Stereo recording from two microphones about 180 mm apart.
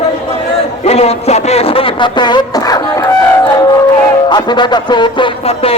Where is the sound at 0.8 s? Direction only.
35° left (ahead or behind).